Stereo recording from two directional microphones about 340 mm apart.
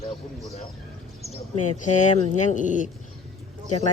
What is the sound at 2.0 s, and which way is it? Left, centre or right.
Speech, left.